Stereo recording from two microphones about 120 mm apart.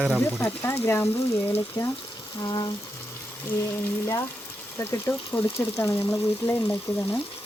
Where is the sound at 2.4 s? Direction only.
35° left (ahead or behind).